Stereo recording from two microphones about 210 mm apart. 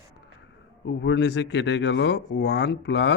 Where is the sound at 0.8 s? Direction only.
55° left (ahead or behind).